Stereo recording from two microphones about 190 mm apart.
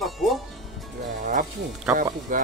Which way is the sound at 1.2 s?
45° right (ahead or behind).